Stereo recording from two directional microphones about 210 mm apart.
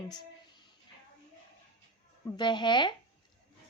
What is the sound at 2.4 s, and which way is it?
Speech, 20° left (ahead or behind).